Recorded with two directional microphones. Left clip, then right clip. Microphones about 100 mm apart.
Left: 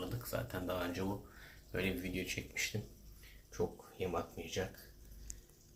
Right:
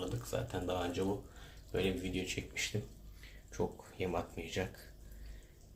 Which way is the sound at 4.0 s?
15° right (ahead or behind).